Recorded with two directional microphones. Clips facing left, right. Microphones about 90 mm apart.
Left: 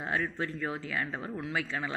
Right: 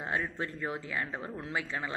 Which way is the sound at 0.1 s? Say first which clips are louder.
Left 2 dB; 25° right (ahead or behind).